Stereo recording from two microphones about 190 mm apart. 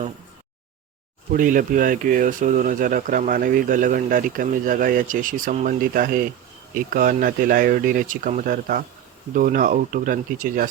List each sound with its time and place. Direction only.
1.3 s speech: 45° right (ahead or behind)